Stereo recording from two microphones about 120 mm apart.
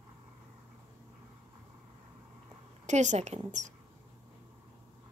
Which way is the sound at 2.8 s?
80° right.